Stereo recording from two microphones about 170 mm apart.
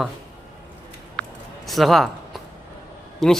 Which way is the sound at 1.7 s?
Centre (ahead or behind).